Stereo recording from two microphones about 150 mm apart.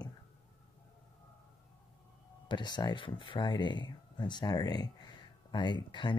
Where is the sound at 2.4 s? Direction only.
30° left (ahead or behind).